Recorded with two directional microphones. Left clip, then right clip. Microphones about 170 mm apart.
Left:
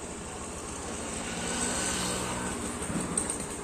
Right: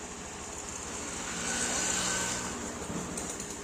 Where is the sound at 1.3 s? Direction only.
75° right (ahead or behind); by 2.0 s 50° right (ahead or behind).